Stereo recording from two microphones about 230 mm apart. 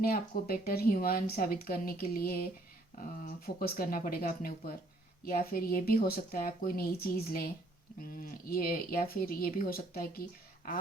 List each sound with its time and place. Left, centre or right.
0.0 s speech: left